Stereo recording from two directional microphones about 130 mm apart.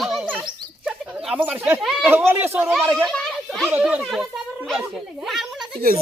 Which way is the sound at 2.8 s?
5° right (ahead or behind).